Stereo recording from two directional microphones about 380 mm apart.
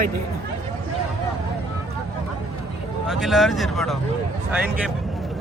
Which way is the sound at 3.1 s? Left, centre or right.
Centre.